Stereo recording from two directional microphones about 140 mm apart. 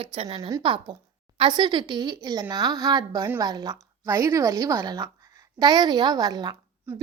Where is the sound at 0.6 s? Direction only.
35° right (ahead or behind).